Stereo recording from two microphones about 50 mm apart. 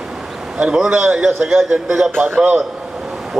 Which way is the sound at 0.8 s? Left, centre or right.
Centre.